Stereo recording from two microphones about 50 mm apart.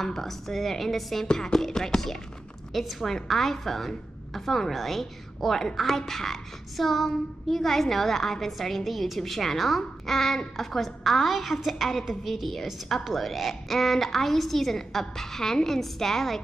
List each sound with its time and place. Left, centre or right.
0.0 s a woman's voice: centre
1.2 s a woman's voice: centre